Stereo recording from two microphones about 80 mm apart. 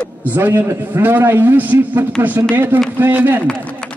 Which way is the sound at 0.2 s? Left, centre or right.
Right.